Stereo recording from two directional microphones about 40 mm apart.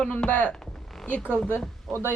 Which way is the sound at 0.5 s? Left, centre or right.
Centre.